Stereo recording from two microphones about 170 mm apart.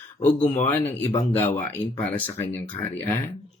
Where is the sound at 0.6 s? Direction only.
10° left (ahead or behind).